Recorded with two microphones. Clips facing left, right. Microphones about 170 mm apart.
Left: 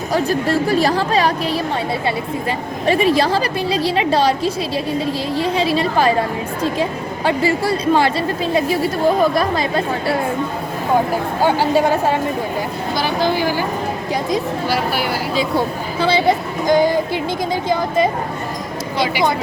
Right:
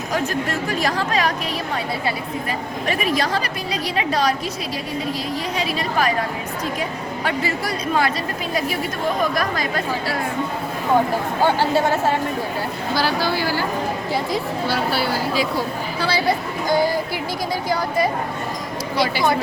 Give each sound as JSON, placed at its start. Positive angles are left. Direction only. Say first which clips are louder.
{"t": 0.1, "sound": "a woman's voice", "louder": "left 6 dB", "side_deg": 35}
{"t": 2.8, "sound": "a woman's voice", "louder": "left 7 dB", "side_deg": 30}
{"t": 7.3, "sound": "a woman's voice", "louder": "left 7 dB", "side_deg": 30}
{"t": 11.4, "sound": "speech", "louder": "left 3 dB", "side_deg": 15}
{"t": 15.4, "sound": "a woman's voice", "louder": "left 3 dB", "side_deg": 25}